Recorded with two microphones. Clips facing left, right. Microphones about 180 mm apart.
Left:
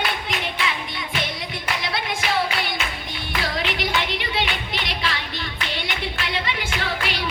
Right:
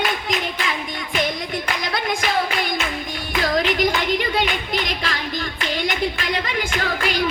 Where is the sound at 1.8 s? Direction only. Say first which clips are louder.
Right 4 dB; 45° right (ahead or behind).